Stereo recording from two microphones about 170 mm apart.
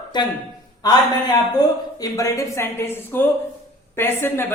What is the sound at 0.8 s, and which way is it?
Speech, 25° left (ahead or behind).